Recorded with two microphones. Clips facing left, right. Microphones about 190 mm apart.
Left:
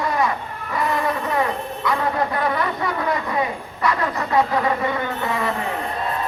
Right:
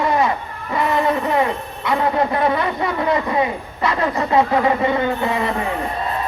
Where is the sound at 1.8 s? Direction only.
25° right (ahead or behind).